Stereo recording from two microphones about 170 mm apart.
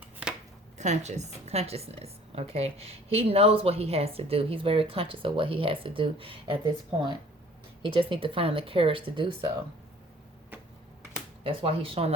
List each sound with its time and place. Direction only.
0.8 s a woman's voice: 40° right (ahead or behind)
7.8 s a woman's voice: 30° right (ahead or behind)
11.4 s a woman's voice: 35° right (ahead or behind)